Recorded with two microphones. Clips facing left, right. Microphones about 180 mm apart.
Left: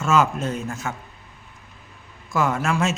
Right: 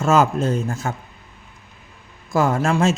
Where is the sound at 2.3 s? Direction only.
35° right (ahead or behind).